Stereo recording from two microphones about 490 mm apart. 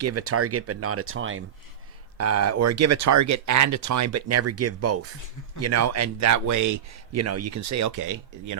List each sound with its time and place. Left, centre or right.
0.0 s a man's voice: right